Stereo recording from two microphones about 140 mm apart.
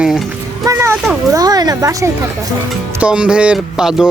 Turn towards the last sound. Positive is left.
turn(degrees=-5)  # may be behind; listen again after turning